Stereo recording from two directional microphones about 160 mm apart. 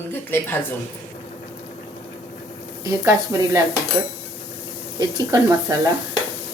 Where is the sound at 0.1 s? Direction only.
15° left (ahead or behind).